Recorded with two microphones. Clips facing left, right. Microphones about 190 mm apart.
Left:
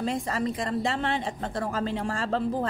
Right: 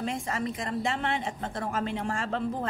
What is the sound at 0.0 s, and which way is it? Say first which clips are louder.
A woman's voice: left 3 dB; 35° left (ahead or behind).